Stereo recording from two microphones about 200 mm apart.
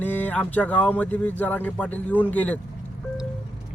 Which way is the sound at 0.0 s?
10° left (ahead or behind).